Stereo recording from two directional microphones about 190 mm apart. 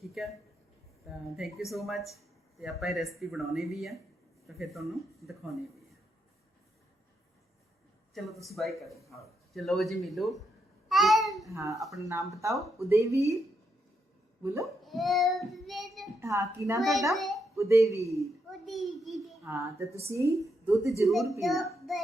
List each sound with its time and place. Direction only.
0.0 s speech: centre (ahead or behind)
8.1 s speech: centre (ahead or behind)
10.8 s babbling: centre (ahead or behind)
11.4 s a woman's voice: 15° right (ahead or behind)
14.6 s a child's voice: centre (ahead or behind)
16.2 s a woman's voice: 15° right (ahead or behind)
16.8 s speech: centre (ahead or behind)
17.5 s speech: 15° right (ahead or behind)
18.6 s speech: centre (ahead or behind)
19.5 s a woman's voice: 15° right (ahead or behind)
21.1 s speech: centre (ahead or behind)